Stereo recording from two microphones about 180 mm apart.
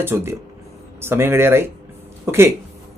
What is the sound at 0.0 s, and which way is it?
Speech, 15° right (ahead or behind).